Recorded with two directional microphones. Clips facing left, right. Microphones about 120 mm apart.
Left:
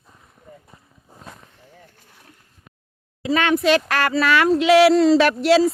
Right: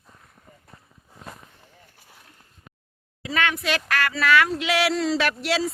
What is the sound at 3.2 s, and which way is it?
Speech, 30° left (ahead or behind).